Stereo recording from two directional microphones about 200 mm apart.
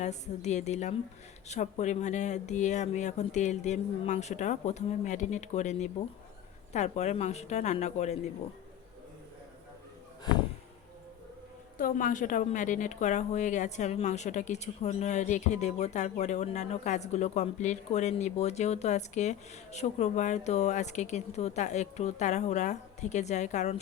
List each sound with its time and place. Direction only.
0.0 s a woman's voice: 35° left (ahead or behind)
11.8 s a woman's voice: 45° left (ahead or behind)